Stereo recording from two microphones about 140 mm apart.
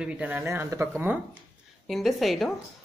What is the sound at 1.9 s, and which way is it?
Speech, centre (ahead or behind).